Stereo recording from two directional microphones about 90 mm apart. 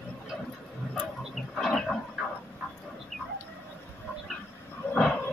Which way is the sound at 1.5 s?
5° left (ahead or behind).